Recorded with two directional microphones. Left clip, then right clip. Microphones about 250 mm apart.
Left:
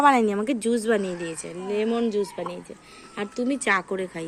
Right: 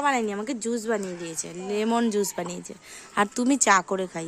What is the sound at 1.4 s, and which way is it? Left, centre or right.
A woman's voice, right.